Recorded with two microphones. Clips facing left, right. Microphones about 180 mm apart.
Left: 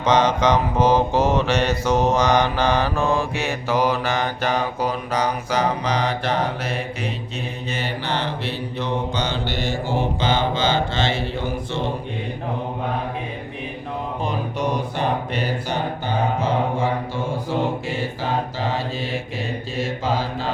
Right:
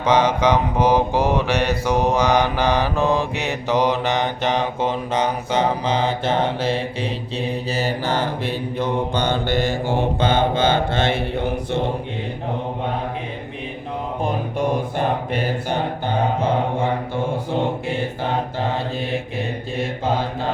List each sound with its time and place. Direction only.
0.0 s mantra: 10° right (ahead or behind); by 7.1 s 30° right (ahead or behind)
7.7 s mantra: 40° right (ahead or behind); by 11.8 s 60° right (ahead or behind)
14.3 s mantra: 50° right (ahead or behind)
19.7 s mantra: 55° right (ahead or behind)